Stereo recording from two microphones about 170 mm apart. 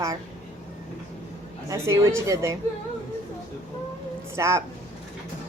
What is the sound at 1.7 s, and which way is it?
Speech, 15° right (ahead or behind).